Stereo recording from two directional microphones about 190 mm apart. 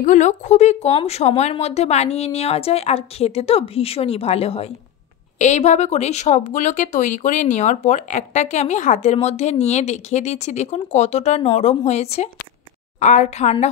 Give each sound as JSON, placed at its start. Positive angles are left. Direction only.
{"t": 0.0, "sound": "speech", "side_deg": 40}